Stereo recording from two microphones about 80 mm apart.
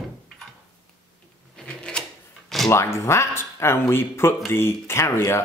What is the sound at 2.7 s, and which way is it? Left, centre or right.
Speech, left.